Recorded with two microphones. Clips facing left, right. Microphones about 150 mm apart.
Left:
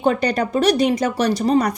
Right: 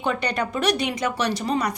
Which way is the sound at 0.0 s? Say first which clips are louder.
Left 6 dB; 35° left (ahead or behind).